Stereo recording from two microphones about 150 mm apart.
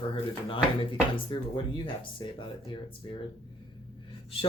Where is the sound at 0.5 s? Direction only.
35° left (ahead or behind).